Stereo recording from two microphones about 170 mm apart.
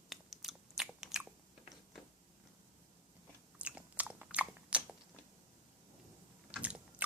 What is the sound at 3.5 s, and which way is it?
Biting, 10° right (ahead or behind).